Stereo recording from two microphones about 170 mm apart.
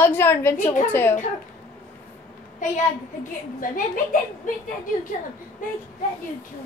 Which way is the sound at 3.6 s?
55° left (ahead or behind).